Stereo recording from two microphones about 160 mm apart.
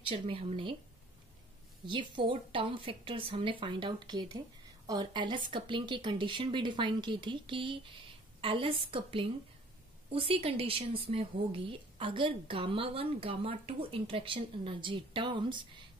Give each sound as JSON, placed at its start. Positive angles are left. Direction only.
{"t": 0.0, "sound": "a woman's voice", "side_deg": -35}
{"t": 1.9, "sound": "a woman's voice", "side_deg": -30}